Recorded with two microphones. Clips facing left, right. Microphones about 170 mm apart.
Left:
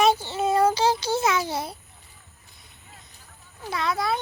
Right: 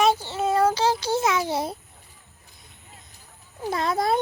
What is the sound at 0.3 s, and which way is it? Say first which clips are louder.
Child singing: even; 10° left (ahead or behind).